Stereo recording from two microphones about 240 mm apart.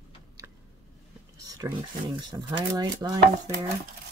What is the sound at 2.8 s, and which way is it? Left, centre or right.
Chopping, centre.